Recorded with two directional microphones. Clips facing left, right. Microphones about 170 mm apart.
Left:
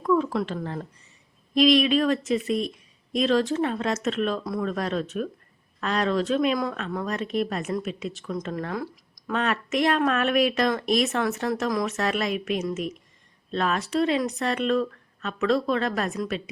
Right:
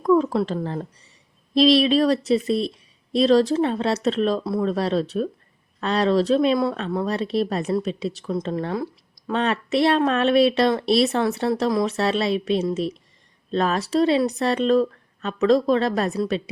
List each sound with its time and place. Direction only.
0.0 s speech: 35° right (ahead or behind)